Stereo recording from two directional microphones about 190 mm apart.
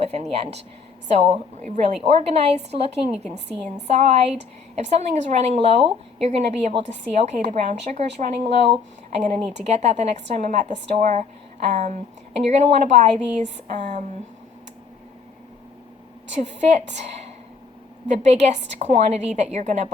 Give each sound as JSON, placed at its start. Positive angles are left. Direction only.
{"t": 0.0, "sound": "speech", "side_deg": -35}
{"t": 16.3, "sound": "speech", "side_deg": -35}
{"t": 18.1, "sound": "speech", "side_deg": -35}